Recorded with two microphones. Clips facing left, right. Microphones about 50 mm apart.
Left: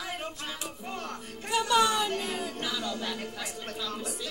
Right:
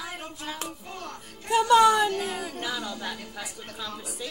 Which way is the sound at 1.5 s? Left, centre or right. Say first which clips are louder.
Right 6 dB; right.